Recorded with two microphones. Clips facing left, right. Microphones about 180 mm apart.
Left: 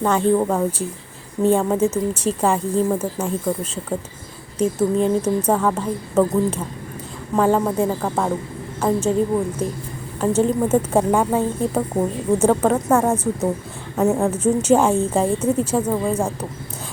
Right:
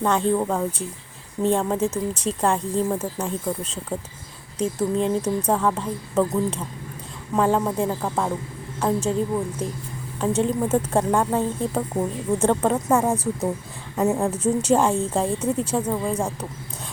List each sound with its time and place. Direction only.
0.0 s a woman's voice: 5° left (ahead or behind)